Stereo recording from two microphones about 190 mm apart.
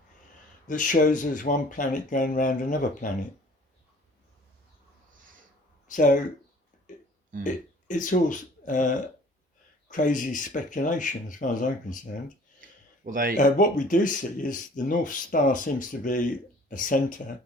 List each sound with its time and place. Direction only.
0.7 s speech: 45° left (ahead or behind)
5.9 s speech: 45° left (ahead or behind)
7.4 s speech: 40° left (ahead or behind)
9.9 s speech: 45° left (ahead or behind)
13.1 s speech: 50° right (ahead or behind)
13.3 s speech: 45° left (ahead or behind)